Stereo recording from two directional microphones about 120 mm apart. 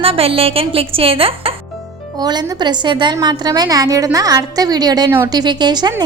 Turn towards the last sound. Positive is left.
turn(degrees=-35)  # may be behind; listen again after turning